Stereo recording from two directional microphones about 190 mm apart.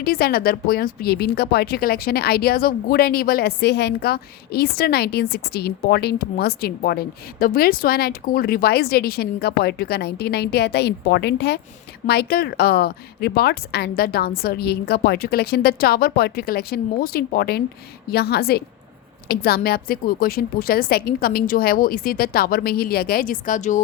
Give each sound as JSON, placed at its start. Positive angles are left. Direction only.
{"t": 0.0, "sound": "a woman's voice", "side_deg": 55}